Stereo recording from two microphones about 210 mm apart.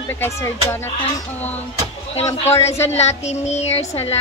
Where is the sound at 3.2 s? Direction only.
30° left (ahead or behind).